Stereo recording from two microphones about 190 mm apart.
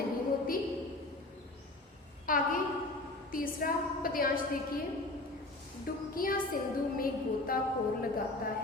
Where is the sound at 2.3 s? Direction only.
45° left (ahead or behind).